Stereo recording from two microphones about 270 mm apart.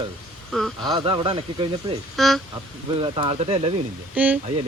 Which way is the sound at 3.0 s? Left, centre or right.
Centre.